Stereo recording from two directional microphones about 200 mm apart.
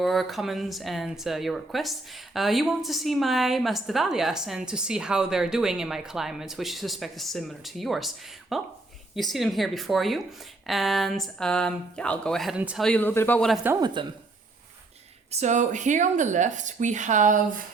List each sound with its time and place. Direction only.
0.0 s speech: centre (ahead or behind)
13.7 s speech: 20° right (ahead or behind)
15.3 s speech: 35° right (ahead or behind)